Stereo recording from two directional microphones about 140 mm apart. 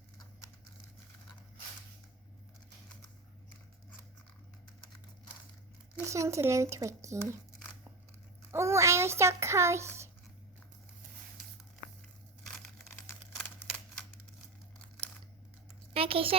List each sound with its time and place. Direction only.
6.1 s speech: 20° right (ahead or behind)
8.5 s a child's voice: 20° right (ahead or behind)
15.9 s a sound: 40° right (ahead or behind)